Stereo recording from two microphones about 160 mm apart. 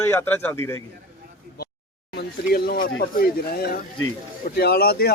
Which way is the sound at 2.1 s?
70° left (ahead or behind).